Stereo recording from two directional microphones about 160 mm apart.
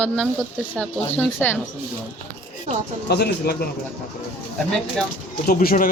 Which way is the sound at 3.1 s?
85° left.